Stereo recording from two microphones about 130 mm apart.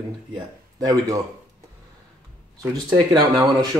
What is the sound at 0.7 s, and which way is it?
Speech, 25° right (ahead or behind).